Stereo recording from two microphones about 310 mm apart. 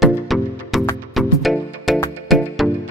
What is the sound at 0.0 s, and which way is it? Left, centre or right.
Music, centre.